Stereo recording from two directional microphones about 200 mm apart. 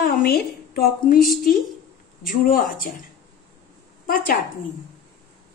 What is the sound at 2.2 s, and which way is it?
Speech, 45° left (ahead or behind).